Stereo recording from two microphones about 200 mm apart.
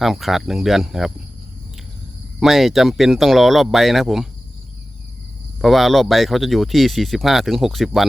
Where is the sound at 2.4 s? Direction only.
Centre (ahead or behind).